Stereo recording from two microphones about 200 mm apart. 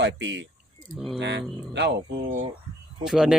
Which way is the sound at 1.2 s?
60° right (ahead or behind).